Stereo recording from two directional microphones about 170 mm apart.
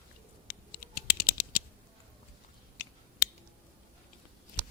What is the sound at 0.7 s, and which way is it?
Typing, 60° left (ahead or behind).